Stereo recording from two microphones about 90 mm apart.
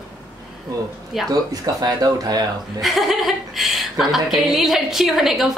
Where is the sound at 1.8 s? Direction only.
45° right (ahead or behind).